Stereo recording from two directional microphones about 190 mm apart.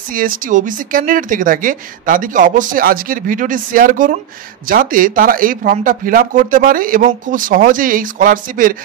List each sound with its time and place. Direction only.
0.1 s speech: 45° right (ahead or behind)